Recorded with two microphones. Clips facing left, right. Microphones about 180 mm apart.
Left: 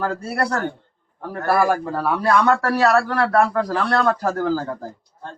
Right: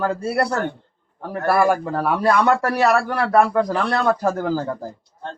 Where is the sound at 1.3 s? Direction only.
20° right (ahead or behind).